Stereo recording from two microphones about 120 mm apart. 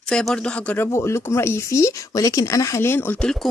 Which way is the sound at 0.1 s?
5° left (ahead or behind).